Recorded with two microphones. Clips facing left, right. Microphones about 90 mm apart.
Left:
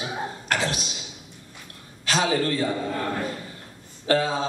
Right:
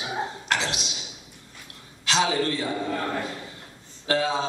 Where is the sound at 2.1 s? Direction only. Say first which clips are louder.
Left 1 dB; 45° left (ahead or behind).